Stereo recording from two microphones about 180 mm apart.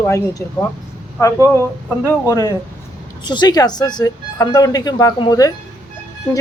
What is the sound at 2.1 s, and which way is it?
Speech, 15° left (ahead or behind).